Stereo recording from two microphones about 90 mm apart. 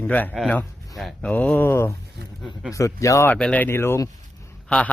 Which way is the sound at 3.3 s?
15° left (ahead or behind).